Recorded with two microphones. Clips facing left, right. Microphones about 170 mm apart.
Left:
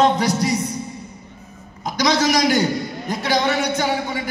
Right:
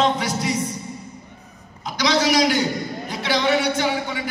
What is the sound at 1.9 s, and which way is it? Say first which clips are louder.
A man's voice: left 1 dB; 45° left (ahead or behind).